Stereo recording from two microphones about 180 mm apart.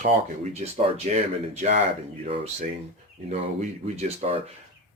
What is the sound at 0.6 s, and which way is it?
Speech, 40° right (ahead or behind).